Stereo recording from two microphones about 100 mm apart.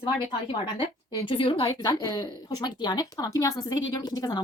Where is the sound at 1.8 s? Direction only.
40° left (ahead or behind).